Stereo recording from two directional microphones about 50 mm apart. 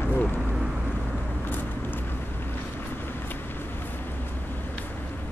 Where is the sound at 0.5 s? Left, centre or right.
Centre.